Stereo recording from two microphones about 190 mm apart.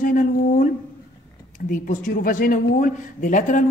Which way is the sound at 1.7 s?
45° left (ahead or behind).